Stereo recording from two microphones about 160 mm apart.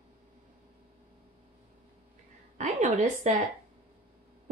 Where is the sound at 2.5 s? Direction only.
45° right (ahead or behind).